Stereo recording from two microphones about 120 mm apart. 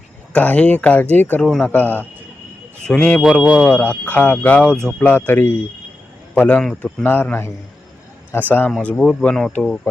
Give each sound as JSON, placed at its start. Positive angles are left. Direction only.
{"t": 0.3, "sound": "speech", "side_deg": 10}
{"t": 1.4, "sound": "speech", "side_deg": 0}
{"t": 1.6, "sound": "speech", "side_deg": 15}